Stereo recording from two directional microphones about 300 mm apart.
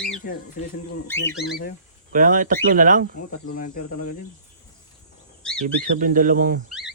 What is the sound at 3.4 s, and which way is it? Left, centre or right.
Speech, left.